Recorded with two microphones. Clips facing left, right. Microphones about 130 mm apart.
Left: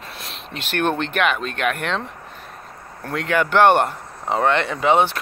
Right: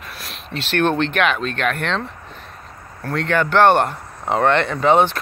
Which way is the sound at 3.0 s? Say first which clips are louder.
Right 1 dB; 10° left (ahead or behind).